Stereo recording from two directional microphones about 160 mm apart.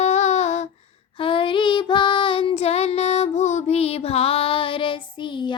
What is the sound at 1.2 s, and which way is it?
Child singing, 30° left (ahead or behind).